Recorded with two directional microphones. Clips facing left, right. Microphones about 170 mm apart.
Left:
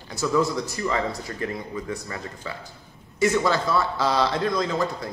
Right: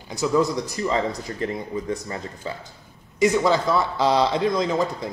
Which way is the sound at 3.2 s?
15° right (ahead or behind).